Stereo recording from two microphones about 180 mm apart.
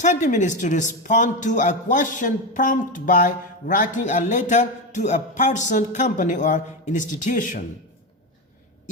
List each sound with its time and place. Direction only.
0.0 s a man's voice: 40° left (ahead or behind)